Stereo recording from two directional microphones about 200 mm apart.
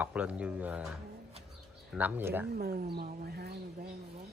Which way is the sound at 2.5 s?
50° right (ahead or behind).